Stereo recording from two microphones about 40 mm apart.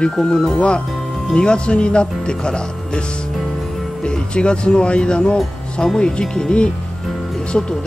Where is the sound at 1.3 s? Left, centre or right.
Left.